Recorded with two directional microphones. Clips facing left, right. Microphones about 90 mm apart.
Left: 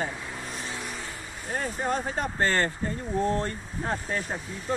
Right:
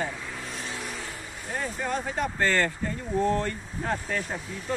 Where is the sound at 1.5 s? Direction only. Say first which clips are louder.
Left 2 dB; 40° left (ahead or behind).